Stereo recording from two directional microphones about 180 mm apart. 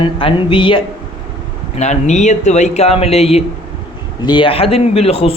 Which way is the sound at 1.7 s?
40° left (ahead or behind).